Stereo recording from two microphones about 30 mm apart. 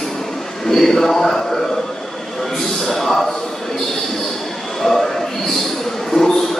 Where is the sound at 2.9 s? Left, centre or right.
Centre.